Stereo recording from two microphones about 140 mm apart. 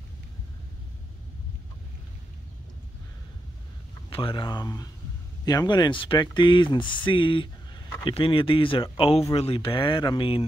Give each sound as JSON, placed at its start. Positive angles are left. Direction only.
{"t": 4.1, "sound": "speech", "side_deg": 40}